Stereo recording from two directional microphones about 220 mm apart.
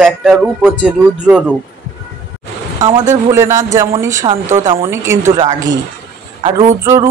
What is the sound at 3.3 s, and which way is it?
A man's voice, 15° right (ahead or behind).